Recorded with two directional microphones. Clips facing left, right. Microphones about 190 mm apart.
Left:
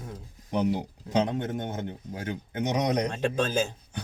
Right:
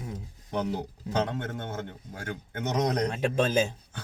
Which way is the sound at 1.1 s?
15° left (ahead or behind).